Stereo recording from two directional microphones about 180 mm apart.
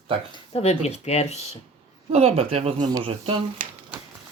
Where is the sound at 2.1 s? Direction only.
35° right (ahead or behind).